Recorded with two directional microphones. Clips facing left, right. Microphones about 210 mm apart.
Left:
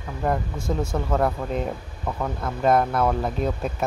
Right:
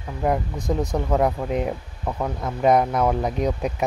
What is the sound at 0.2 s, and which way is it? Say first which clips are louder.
Speech: right 2 dB; 15° right (ahead or behind).